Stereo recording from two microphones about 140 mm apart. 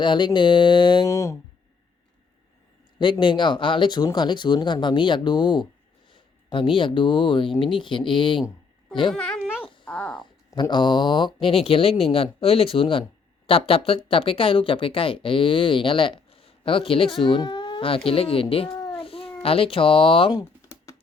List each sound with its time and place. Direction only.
0.0 s speech: 35° left (ahead or behind)
1.0 s speech: 20° left (ahead or behind)
3.0 s speech: 35° left (ahead or behind)
9.1 s speech: 5° left (ahead or behind)
9.8 s a sound: 10° left (ahead or behind)
10.2 s speech: 35° left (ahead or behind)
18.8 s cat: 40° left (ahead or behind)
19.4 s speech: 45° left (ahead or behind)
20.3 s typing: 20° left (ahead or behind)